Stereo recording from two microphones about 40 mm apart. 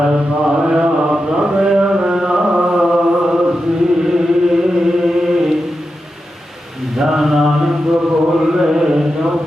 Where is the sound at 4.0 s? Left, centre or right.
Centre.